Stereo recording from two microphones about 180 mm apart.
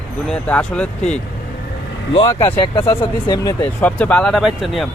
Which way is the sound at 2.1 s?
20° left (ahead or behind).